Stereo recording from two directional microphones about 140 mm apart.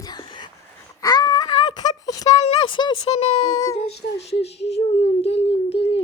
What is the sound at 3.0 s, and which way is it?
Speech, 50° left (ahead or behind).